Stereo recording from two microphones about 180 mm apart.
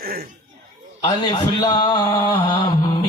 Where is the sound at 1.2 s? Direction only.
25° left (ahead or behind).